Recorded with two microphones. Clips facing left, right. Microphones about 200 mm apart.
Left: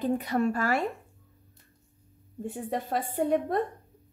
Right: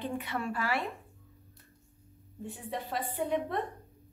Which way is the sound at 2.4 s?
45° left (ahead or behind).